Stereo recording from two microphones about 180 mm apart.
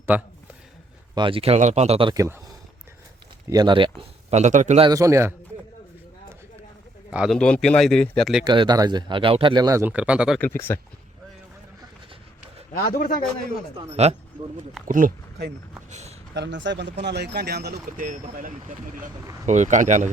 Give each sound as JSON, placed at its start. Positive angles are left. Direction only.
{"t": 0.1, "sound": "speech", "side_deg": -10}
{"t": 1.1, "sound": "speech", "side_deg": -30}
{"t": 2.1, "sound": "speech", "side_deg": -15}
{"t": 3.5, "sound": "speech", "side_deg": -25}
{"t": 4.4, "sound": "speech", "side_deg": -40}
{"t": 4.8, "sound": "speech", "side_deg": -20}
{"t": 7.1, "sound": "speech", "side_deg": -5}
{"t": 7.3, "sound": "speech", "side_deg": 5}
{"t": 8.4, "sound": "speech", "side_deg": -25}
{"t": 10.4, "sound": "speech", "side_deg": 10}
{"t": 12.7, "sound": "a man's voice", "side_deg": 55}
{"t": 13.9, "sound": "speech", "side_deg": -35}
{"t": 14.8, "sound": "speech", "side_deg": -45}
{"t": 16.3, "sound": "speech", "side_deg": -80}